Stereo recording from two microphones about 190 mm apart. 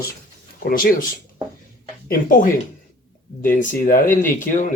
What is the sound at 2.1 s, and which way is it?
Speech, 45° left (ahead or behind).